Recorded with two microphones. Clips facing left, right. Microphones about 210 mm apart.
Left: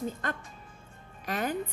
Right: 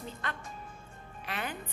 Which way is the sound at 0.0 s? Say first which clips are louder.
Left 6 dB; 45° left (ahead or behind).